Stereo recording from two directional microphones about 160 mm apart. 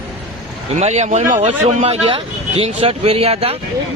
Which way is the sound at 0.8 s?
45° right (ahead or behind).